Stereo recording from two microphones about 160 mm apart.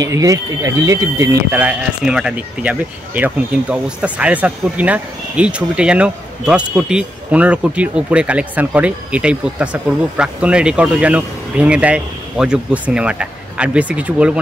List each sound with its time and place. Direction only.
0.0 s speech: 20° right (ahead or behind)